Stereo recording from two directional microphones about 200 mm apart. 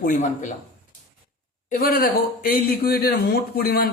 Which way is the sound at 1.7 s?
45° left (ahead or behind).